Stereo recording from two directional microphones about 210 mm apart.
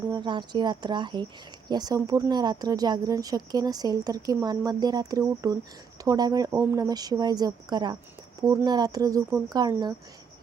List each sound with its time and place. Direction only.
0.1 s a woman's voice: 20° right (ahead or behind)